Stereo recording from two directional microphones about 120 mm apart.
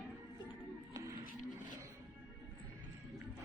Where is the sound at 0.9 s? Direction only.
25° right (ahead or behind).